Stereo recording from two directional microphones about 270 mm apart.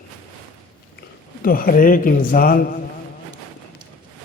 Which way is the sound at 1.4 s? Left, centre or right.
Left.